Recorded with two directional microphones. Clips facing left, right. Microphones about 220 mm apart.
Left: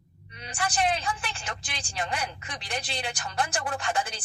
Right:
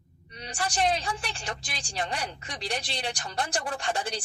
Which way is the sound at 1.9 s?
30° right (ahead or behind).